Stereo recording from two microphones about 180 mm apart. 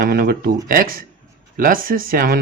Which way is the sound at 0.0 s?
55° right (ahead or behind).